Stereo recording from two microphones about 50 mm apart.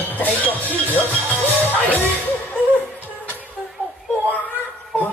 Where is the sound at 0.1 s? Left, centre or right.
Left.